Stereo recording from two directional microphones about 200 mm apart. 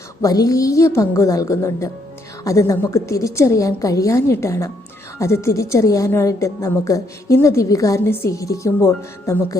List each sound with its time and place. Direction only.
0.2 s a woman's voice: 15° left (ahead or behind)